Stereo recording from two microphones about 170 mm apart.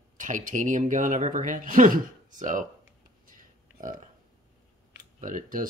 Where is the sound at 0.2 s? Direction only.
50° right (ahead or behind).